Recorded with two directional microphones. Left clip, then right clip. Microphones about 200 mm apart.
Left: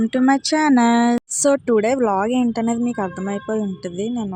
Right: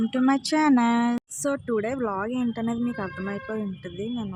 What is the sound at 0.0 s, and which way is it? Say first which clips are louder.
Speech: left 6 dB; 20° left (ahead or behind).